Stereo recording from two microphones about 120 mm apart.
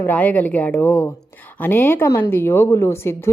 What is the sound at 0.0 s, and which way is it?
A woman's voice, 15° left (ahead or behind).